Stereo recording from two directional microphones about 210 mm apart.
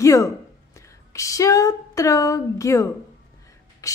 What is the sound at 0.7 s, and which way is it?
Speech, 15° left (ahead or behind).